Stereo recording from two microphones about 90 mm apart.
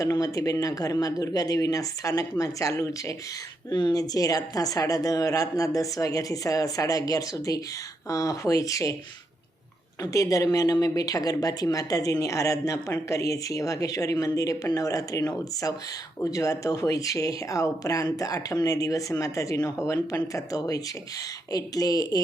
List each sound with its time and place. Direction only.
0.0 s a woman's voice: 40° left (ahead or behind)
3.7 s a woman's voice: 60° left (ahead or behind); by 9.0 s 40° left (ahead or behind)
10.0 s a woman's voice: 40° left (ahead or behind)
16.3 s a woman's voice: 40° left (ahead or behind)